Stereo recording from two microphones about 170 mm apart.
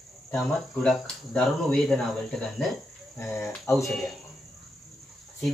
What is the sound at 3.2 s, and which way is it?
Cricket, 15° left (ahead or behind).